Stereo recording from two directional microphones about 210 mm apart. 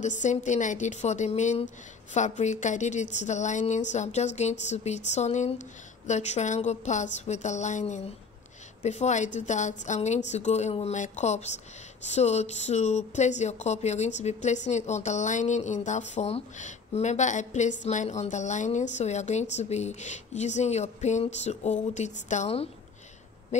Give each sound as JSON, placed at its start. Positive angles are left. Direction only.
{"t": 0.0, "sound": "speech", "side_deg": 35}